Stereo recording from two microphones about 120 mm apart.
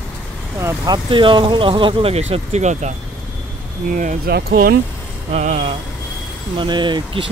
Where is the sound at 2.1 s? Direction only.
60° right (ahead or behind); by 2.9 s 75° right (ahead or behind).